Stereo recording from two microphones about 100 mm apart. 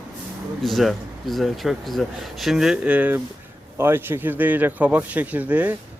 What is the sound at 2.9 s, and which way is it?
A man's voice, 15° right (ahead or behind).